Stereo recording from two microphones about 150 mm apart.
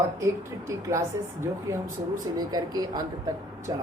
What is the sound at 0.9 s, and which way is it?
Speech, 20° right (ahead or behind).